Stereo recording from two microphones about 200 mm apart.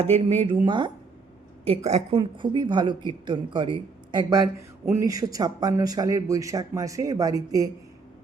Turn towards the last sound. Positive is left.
turn(degrees=-15)  # may be behind; listen again after turning